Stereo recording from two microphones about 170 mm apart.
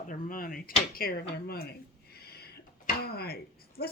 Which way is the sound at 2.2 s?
65° left (ahead or behind).